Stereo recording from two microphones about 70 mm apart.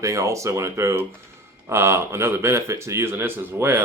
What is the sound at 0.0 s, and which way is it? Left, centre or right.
Speech, right.